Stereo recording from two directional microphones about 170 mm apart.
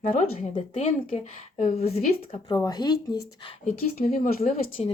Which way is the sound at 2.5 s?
25° left (ahead or behind).